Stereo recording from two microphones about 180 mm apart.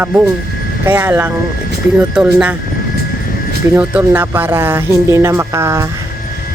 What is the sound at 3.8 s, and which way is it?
Speech, 10° right (ahead or behind).